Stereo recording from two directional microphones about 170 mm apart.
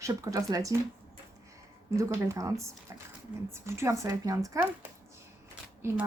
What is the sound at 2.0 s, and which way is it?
Speech, 20° right (ahead or behind).